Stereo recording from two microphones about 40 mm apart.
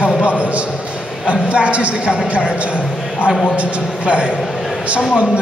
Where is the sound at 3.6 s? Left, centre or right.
Right.